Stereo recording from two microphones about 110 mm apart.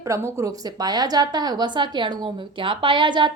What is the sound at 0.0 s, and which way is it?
A woman's voice, 25° right (ahead or behind).